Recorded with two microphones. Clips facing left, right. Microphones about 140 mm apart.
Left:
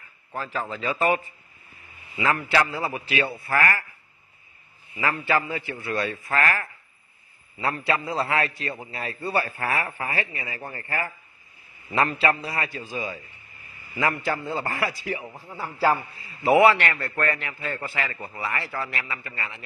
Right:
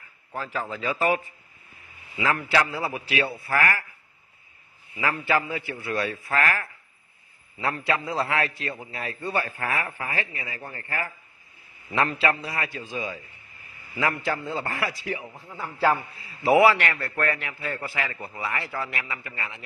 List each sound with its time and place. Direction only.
0.3 s a man's voice: 10° right (ahead or behind)
5.1 s a man's voice: 10° right (ahead or behind)
6.3 s speech: 5° left (ahead or behind)
7.7 s a man's voice: centre (ahead or behind)
9.6 s speech: 30° left (ahead or behind)
9.8 s a man's voice: 15° left (ahead or behind)
14.2 s a man's voice: centre (ahead or behind)